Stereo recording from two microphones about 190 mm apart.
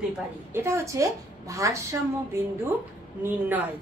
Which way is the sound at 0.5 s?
15° right (ahead or behind).